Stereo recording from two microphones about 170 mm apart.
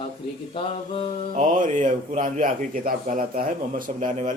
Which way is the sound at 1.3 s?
45° right (ahead or behind).